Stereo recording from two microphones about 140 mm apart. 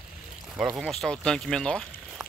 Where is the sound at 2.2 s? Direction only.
5° right (ahead or behind).